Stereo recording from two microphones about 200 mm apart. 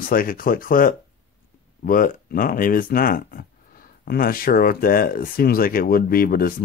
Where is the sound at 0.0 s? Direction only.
45° left (ahead or behind).